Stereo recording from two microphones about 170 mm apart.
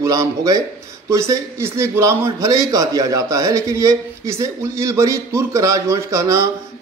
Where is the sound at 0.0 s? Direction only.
20° right (ahead or behind).